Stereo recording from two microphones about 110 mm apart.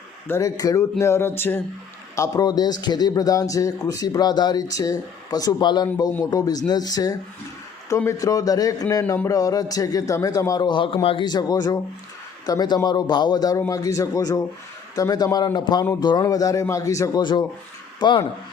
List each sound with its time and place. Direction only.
0.3 s speech: 30° left (ahead or behind)
2.1 s speech: 30° left (ahead or behind); by 11.3 s 55° left (ahead or behind)
11.3 s speech: 35° left (ahead or behind)
18.0 s speech: 45° left (ahead or behind)